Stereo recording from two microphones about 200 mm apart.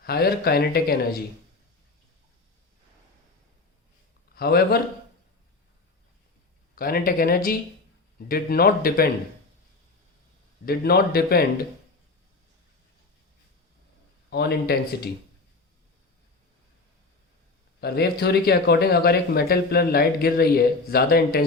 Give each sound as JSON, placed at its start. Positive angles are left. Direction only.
{"t": 0.0, "sound": "speech", "side_deg": 50}
{"t": 4.4, "sound": "a man's voice", "side_deg": 50}
{"t": 6.7, "sound": "speech", "side_deg": 50}
{"t": 10.7, "sound": "speech", "side_deg": 50}
{"t": 14.3, "sound": "speech", "side_deg": 55}
{"t": 17.7, "sound": "speech", "side_deg": 55}